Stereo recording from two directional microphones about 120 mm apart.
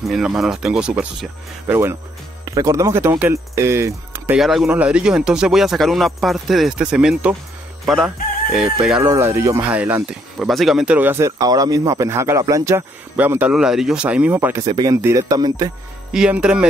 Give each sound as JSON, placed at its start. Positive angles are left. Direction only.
{"t": 0.0, "sound": "speech", "side_deg": -5}
{"t": 1.7, "sound": "speech", "side_deg": -20}
{"t": 4.4, "sound": "speech", "side_deg": 0}
{"t": 9.0, "sound": "speech", "side_deg": -25}
{"t": 10.4, "sound": "speech", "side_deg": 0}
{"t": 13.1, "sound": "speech", "side_deg": -15}
{"t": 14.6, "sound": "speech", "side_deg": -35}
{"t": 15.0, "sound": "speech", "side_deg": -20}
{"t": 15.2, "sound": "speech", "side_deg": -35}
{"t": 16.1, "sound": "speech", "side_deg": -10}